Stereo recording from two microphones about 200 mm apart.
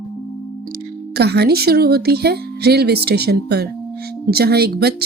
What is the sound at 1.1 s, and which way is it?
Speech, 55° right (ahead or behind).